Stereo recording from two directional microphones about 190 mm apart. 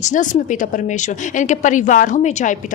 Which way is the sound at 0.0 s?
40° left (ahead or behind).